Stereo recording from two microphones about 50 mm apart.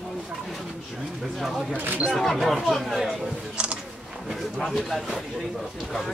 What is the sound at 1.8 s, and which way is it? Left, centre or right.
Single-lens reflex camera, right.